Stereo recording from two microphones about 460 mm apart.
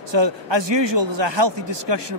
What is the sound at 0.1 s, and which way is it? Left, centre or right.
Speech, right.